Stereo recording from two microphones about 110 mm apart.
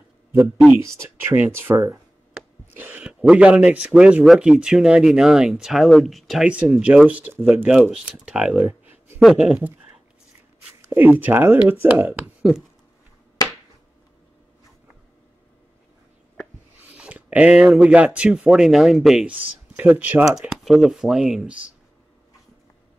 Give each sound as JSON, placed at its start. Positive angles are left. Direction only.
{"t": 0.7, "sound": "speech", "side_deg": -15}
{"t": 11.0, "sound": "speech", "side_deg": -15}
{"t": 16.9, "sound": "speech", "side_deg": -10}
{"t": 19.4, "sound": "speech", "side_deg": -15}
{"t": 20.3, "sound": "speech", "side_deg": 0}